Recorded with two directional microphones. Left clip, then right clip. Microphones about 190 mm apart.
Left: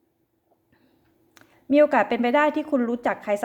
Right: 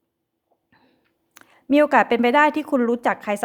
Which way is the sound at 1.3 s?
35° right (ahead or behind).